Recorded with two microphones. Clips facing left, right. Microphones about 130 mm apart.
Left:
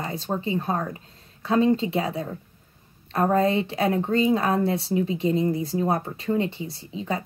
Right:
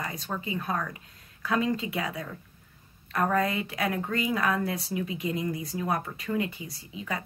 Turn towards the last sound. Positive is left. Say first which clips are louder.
# left 6 dB
turn(degrees=30)  # may be behind; listen again after turning